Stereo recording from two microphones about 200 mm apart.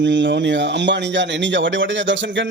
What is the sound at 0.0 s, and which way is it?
A man's voice, 65° right (ahead or behind).